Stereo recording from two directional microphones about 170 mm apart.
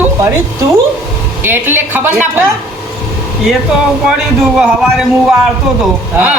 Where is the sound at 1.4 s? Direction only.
10° right (ahead or behind).